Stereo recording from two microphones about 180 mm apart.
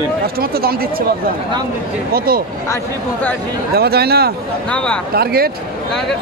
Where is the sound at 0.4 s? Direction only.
55° right (ahead or behind).